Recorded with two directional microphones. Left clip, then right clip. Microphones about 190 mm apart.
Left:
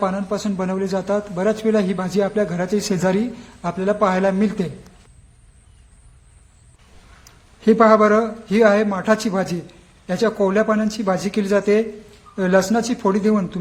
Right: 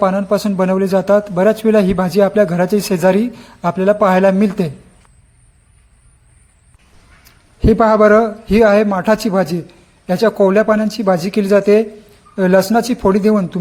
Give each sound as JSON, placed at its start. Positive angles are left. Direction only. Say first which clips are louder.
{"t": 0.0, "sound": "a man's voice", "louder": "right 8 dB", "side_deg": -40}
{"t": 7.6, "sound": "a man's voice", "louder": "right 3 dB", "side_deg": -30}